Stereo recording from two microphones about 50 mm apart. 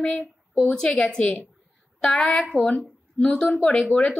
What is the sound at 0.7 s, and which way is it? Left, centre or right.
A woman's voice, left.